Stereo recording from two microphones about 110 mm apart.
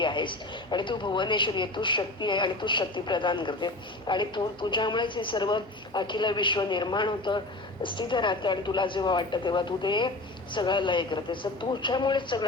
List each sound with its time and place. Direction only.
0.0 s speech: 45° left (ahead or behind)